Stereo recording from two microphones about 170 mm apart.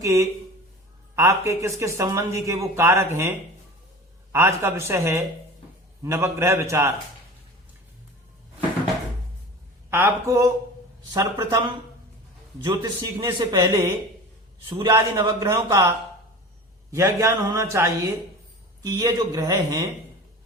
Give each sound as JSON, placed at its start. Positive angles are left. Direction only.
{"t": 0.0, "sound": "speech", "side_deg": -15}
{"t": 9.9, "sound": "a man's voice", "side_deg": -15}
{"t": 15.1, "sound": "speech", "side_deg": -20}
{"t": 16.9, "sound": "a man's voice", "side_deg": -15}